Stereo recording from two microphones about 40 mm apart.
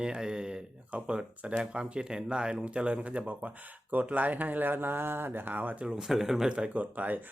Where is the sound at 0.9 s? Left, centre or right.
Right.